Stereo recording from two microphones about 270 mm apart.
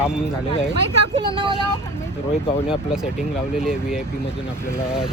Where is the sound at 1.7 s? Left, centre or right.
Centre.